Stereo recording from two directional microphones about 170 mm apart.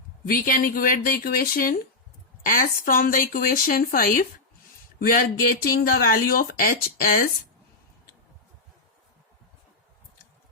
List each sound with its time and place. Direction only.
0.3 s speech: 55° left (ahead or behind)